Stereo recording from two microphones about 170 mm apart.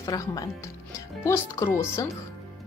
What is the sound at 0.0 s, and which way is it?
Speech, 20° left (ahead or behind).